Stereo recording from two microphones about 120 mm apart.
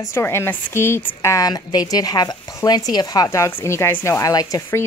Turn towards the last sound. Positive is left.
turn(degrees=30)  # may be behind; listen again after turning